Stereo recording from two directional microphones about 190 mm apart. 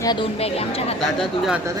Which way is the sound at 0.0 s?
25° left (ahead or behind).